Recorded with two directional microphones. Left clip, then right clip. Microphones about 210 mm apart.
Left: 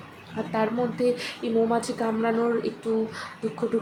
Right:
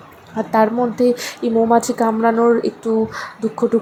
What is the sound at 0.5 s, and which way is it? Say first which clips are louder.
Speech: right 10 dB; 25° right (ahead or behind).